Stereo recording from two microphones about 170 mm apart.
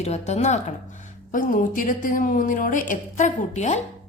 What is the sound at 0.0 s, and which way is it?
Speech, 40° left (ahead or behind).